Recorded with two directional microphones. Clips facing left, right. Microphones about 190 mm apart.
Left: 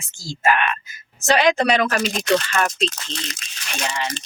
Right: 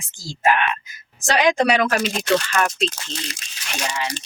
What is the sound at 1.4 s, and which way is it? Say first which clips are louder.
Speech: right 2 dB; 10° right (ahead or behind).